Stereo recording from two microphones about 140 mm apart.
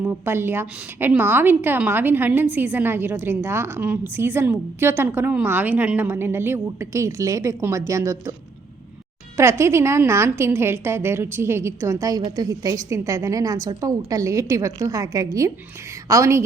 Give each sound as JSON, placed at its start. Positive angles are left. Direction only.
{"t": 0.0, "sound": "a woman's voice", "side_deg": -15}
{"t": 9.4, "sound": "a woman's voice", "side_deg": -20}